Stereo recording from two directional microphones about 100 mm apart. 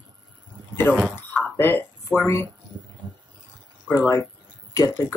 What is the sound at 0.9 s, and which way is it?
Speech, 10° right (ahead or behind).